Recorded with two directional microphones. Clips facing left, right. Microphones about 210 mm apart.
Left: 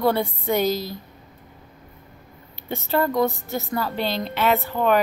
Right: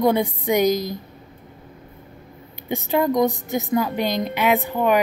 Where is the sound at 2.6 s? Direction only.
15° right (ahead or behind).